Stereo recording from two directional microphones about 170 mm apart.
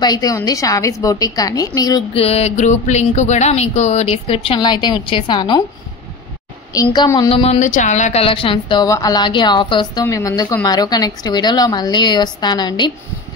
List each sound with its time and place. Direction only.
0.0 s a woman's voice: 25° left (ahead or behind)
2.1 s speech: 35° left (ahead or behind)
6.7 s a woman's voice: 20° left (ahead or behind)
7.6 s a woman's voice: 45° left (ahead or behind); by 12.9 s 25° left (ahead or behind)